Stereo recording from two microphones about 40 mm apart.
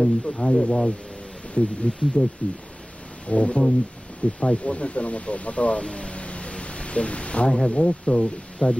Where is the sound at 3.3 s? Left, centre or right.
Left.